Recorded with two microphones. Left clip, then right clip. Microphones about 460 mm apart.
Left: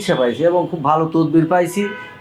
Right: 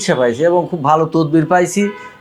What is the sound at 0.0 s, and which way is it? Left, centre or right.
Speech, right.